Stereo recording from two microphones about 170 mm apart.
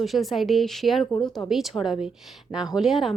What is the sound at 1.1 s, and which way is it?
Speech, 25° left (ahead or behind).